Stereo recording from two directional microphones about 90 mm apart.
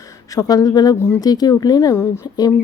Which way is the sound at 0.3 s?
45° left (ahead or behind).